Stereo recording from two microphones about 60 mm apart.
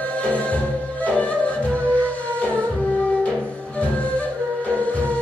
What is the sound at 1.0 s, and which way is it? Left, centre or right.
Music, left.